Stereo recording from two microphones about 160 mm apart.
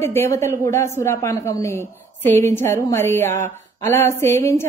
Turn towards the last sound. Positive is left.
turn(degrees=15)  # may be behind; listen again after turning